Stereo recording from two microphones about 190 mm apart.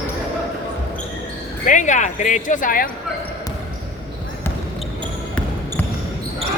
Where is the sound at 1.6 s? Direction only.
40° left (ahead or behind).